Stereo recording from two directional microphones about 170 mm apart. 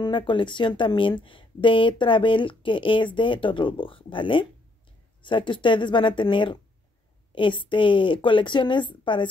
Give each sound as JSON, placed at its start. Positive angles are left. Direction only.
{"t": 0.0, "sound": "speech", "side_deg": 30}